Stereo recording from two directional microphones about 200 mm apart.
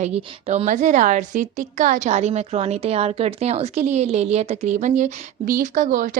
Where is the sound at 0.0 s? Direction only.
30° right (ahead or behind).